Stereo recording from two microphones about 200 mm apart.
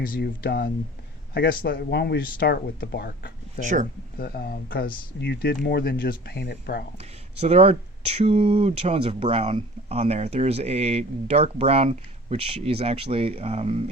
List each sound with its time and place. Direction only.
0.0 s speech: 50° left (ahead or behind)
7.0 s speech: 30° right (ahead or behind)